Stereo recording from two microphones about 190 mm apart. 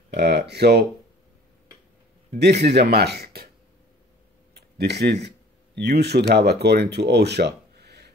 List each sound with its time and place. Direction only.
0.1 s speech: 60° right (ahead or behind)
2.3 s speech: 60° right (ahead or behind)
4.6 s speech: 60° right (ahead or behind)